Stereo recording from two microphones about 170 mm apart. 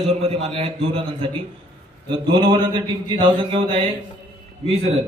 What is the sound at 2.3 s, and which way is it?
A man's voice, 25° right (ahead or behind).